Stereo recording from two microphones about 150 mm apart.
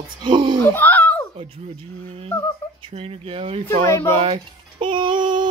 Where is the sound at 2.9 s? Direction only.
40° right (ahead or behind).